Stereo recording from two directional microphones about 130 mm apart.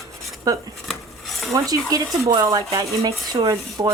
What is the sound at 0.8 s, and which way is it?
Cutlery, centre (ahead or behind).